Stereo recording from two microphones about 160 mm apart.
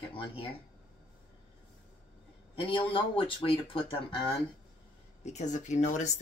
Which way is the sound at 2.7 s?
35° left (ahead or behind).